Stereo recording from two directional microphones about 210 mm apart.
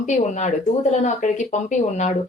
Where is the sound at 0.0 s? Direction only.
35° left (ahead or behind).